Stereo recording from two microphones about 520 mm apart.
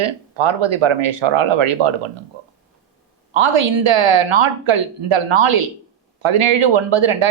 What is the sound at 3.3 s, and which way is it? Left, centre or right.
Speech, right.